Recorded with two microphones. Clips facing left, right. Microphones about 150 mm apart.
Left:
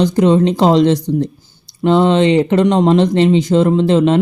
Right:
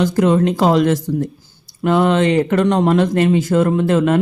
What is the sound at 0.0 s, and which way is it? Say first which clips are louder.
Speech: left 3 dB; 20° left (ahead or behind).